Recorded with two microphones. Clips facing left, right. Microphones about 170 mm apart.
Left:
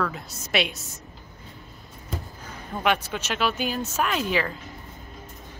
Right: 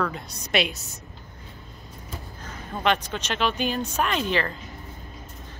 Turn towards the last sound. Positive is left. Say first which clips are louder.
# even
turn(degrees=5)  # may be behind; listen again after turning